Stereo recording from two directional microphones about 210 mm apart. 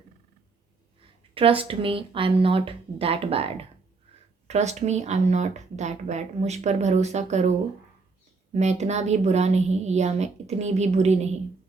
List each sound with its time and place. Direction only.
1.3 s speech: 25° right (ahead or behind)
8.5 s speech: 35° right (ahead or behind)